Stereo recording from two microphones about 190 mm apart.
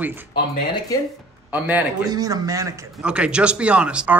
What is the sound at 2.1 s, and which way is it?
Speech, 20° right (ahead or behind).